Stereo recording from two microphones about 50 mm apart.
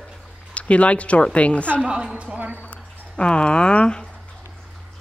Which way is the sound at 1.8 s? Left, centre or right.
Centre.